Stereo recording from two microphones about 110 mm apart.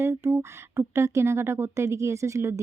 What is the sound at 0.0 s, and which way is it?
Speech, 25° right (ahead or behind).